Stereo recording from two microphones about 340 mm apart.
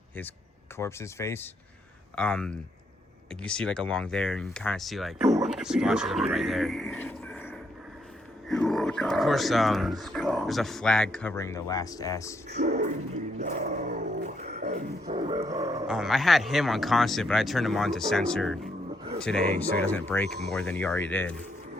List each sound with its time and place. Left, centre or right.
0.8 s speech: centre
12.5 s speech: right
13.4 s dog: right; by 18.7 s centre
19.2 s speech: centre